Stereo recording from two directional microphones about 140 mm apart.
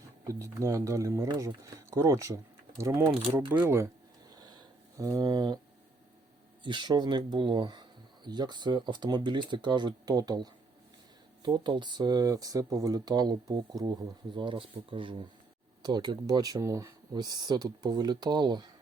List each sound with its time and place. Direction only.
0.3 s speech: 20° right (ahead or behind)
4.4 s a sound: 30° right (ahead or behind)
6.6 s speech: 35° right (ahead or behind)